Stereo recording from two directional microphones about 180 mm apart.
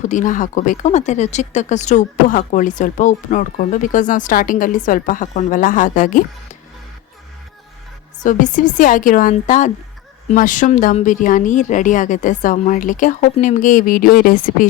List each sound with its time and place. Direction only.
0.0 s speech: 45° left (ahead or behind)
8.2 s speech: 45° left (ahead or behind)